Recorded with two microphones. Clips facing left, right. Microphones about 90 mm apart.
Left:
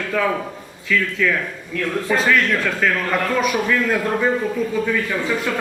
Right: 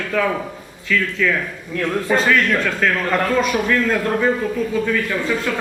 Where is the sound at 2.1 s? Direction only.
Centre (ahead or behind).